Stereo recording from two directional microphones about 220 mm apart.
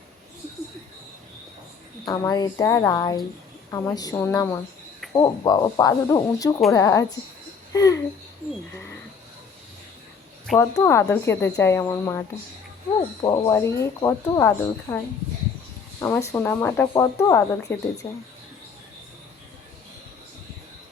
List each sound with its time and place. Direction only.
2.0 s a child's voice: 15° left (ahead or behind)
10.6 s speech: 15° left (ahead or behind)
13.2 s speech: 15° left (ahead or behind)
16.0 s speech: 15° left (ahead or behind)